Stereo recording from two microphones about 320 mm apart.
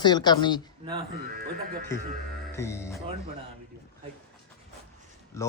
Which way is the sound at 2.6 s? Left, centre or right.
Centre.